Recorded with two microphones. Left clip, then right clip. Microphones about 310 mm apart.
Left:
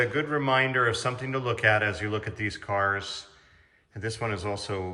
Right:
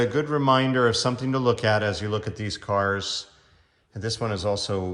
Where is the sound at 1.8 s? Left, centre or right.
Centre.